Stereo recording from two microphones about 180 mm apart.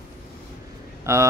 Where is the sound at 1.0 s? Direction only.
15° right (ahead or behind).